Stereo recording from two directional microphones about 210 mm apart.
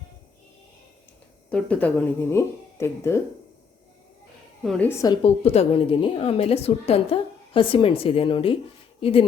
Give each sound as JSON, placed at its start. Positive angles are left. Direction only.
{"t": 1.5, "sound": "a woman's voice", "side_deg": 5}
{"t": 4.6, "sound": "a woman's voice", "side_deg": 5}